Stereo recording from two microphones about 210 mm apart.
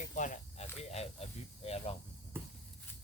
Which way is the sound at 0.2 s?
35° left (ahead or behind).